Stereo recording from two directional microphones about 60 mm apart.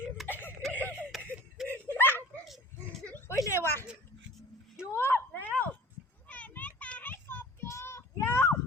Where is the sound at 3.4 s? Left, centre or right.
Left.